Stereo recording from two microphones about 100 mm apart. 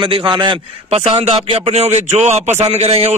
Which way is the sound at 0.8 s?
90° right.